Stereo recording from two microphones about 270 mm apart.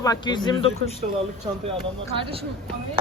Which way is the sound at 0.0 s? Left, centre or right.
Centre.